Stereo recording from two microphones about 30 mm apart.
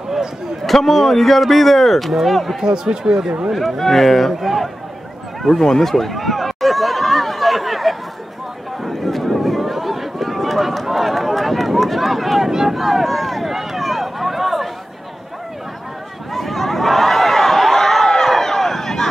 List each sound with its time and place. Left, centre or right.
0.7 s speech: centre
2.6 s speech: right
3.5 s speech: centre
4.4 s speech: centre
5.4 s speech: centre
8.8 s run: centre
12.4 s speech: centre
12.7 s speech: centre
13.5 s run: centre
16.3 s a sound: centre